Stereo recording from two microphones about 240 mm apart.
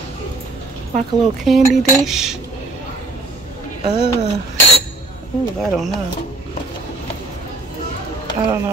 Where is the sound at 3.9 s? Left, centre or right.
Left.